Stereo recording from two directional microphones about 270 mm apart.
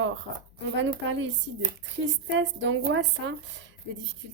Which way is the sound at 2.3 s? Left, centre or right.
Right.